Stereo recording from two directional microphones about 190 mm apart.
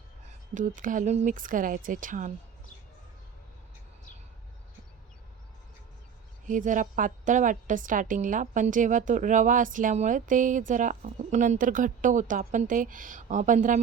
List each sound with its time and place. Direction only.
0.5 s a woman's voice: 45° right (ahead or behind)
6.4 s a woman's voice: 40° right (ahead or behind)